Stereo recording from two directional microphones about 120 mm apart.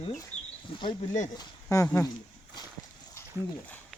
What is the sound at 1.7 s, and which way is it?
Speech, 25° left (ahead or behind).